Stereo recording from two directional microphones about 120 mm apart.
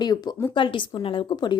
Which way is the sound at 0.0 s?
35° left (ahead or behind).